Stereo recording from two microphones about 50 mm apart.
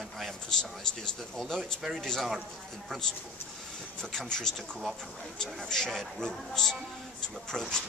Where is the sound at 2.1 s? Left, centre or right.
Centre.